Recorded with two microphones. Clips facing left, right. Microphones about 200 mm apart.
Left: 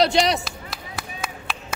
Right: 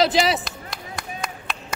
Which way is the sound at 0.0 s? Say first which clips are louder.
Even; centre (ahead or behind).